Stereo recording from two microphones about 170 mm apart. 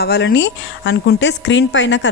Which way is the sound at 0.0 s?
70° left (ahead or behind).